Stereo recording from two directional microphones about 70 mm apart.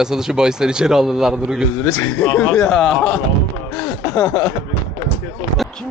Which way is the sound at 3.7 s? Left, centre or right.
Left.